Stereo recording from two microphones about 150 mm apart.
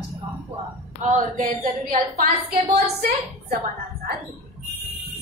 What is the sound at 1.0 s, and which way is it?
A woman's voice, 60° right (ahead or behind).